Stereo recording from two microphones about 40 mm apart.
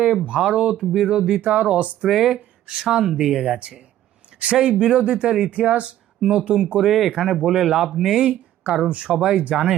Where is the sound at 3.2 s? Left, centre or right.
Centre.